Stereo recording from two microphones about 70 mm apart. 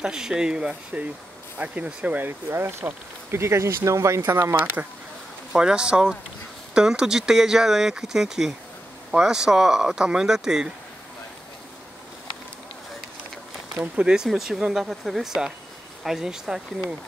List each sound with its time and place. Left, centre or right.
0.0 s speech: centre
2.1 s speech: right
4.2 s speech: right
5.5 s speech: centre
13.9 s speech: centre